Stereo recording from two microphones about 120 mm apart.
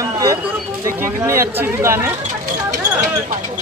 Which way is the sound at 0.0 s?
25° right (ahead or behind).